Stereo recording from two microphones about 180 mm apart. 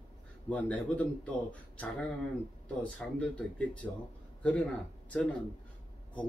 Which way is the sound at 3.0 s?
5° left (ahead or behind).